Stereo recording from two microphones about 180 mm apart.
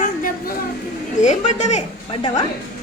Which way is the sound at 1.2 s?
40° left (ahead or behind).